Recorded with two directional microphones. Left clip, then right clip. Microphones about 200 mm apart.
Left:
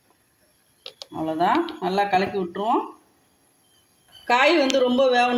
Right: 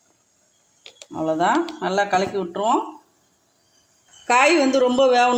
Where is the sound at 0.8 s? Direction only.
10° right (ahead or behind).